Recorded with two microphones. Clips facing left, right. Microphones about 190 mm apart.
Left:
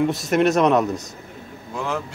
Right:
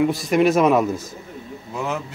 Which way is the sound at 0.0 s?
Centre (ahead or behind).